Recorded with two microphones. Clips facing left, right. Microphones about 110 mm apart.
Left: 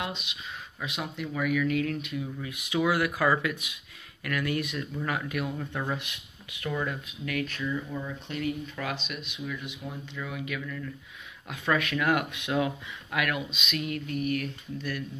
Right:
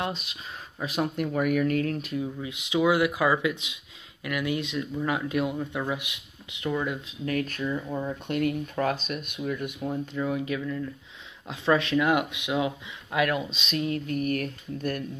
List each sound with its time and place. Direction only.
0.0 s speech: 40° right (ahead or behind)
2.4 s speech: 20° right (ahead or behind)
7.1 s speech: 35° right (ahead or behind)
10.1 s speech: 35° right (ahead or behind)